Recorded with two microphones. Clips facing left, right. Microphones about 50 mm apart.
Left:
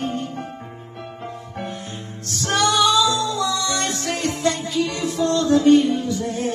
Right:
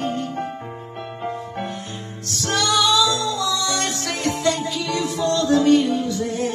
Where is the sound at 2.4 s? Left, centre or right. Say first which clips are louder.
Left 2 dB; left.